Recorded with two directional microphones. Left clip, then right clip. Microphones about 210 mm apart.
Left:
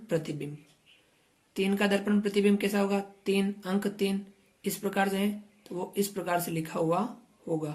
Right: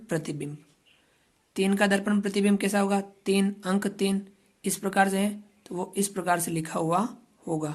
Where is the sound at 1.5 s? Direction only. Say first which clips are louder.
Right 3 dB; 35° right (ahead or behind).